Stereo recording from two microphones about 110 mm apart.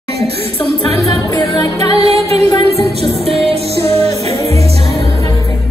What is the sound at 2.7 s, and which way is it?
Music, 70° right (ahead or behind).